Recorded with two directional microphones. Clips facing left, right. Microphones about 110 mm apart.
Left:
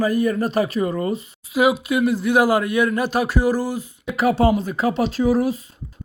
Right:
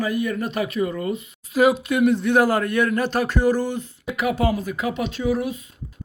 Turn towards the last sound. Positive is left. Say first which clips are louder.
# left 5 dB
turn(degrees=35)  # may be behind; listen again after turning